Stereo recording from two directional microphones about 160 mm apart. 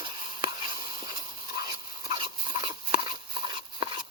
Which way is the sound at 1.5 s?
25° right (ahead or behind).